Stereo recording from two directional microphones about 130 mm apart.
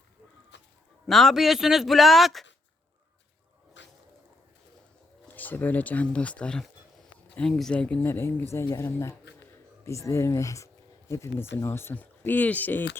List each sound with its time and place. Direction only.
1.0 s a man's voice: centre (ahead or behind)
5.3 s speech: 15° left (ahead or behind)